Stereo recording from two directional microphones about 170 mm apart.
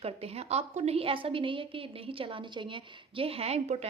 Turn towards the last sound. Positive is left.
turn(degrees=-40)  # may be behind; listen again after turning